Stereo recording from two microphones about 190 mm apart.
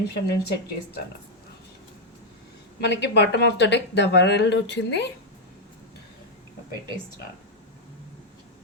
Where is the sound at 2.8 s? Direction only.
60° left (ahead or behind).